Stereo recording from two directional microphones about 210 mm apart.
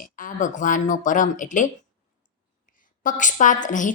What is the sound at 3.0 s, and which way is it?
Speech, 35° left (ahead or behind).